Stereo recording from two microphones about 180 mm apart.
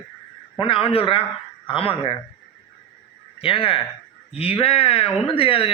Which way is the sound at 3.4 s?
30° left (ahead or behind).